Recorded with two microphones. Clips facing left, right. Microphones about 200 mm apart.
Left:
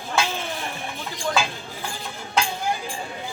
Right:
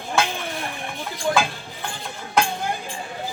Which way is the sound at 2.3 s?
55° right (ahead or behind).